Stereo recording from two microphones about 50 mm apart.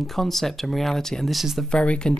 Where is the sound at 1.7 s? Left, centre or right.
Centre.